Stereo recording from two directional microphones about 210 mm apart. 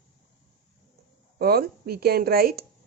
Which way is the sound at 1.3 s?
45° right (ahead or behind).